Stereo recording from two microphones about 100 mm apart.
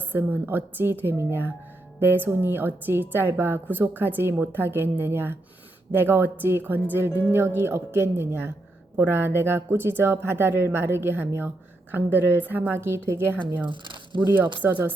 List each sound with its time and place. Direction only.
0.0 s speech: 20° right (ahead or behind)
13.7 s speech: 55° right (ahead or behind)
14.3 s speech: 20° right (ahead or behind)